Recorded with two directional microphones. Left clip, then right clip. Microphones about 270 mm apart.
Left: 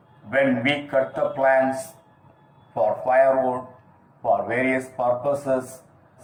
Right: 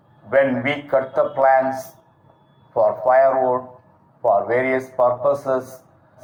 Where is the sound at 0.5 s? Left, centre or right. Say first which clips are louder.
Right 2 dB; right.